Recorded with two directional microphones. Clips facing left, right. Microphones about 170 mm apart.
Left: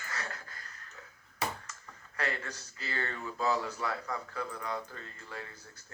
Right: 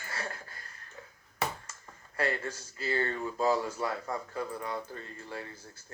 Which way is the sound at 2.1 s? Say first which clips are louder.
Right 5 dB; 40° right (ahead or behind).